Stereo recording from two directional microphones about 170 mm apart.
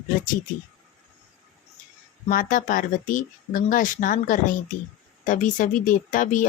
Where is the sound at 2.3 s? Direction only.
55° left (ahead or behind).